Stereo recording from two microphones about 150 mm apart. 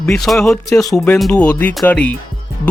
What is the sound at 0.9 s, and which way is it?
Music, 5° left (ahead or behind).